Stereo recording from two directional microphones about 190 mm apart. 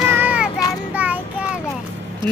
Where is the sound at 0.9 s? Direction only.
10° right (ahead or behind).